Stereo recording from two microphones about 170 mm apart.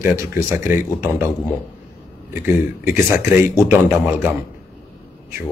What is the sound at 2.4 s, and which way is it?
A man's voice, 15° right (ahead or behind).